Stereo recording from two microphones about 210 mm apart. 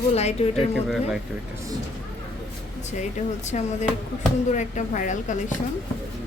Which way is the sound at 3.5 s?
35° left (ahead or behind).